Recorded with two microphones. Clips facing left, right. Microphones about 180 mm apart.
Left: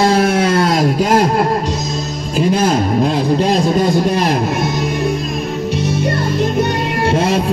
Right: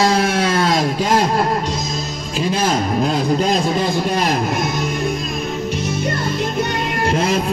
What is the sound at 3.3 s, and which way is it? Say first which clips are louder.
Speech: left 4 dB; 35° left (ahead or behind).